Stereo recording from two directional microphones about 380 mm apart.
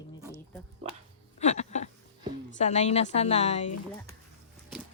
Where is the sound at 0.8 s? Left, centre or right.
Centre.